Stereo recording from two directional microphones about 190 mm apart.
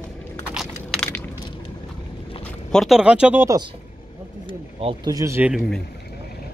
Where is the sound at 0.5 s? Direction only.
5° left (ahead or behind).